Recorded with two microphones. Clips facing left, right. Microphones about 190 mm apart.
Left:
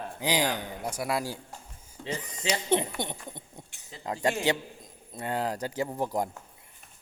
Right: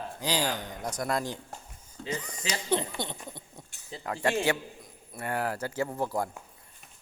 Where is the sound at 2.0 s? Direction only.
25° left (ahead or behind).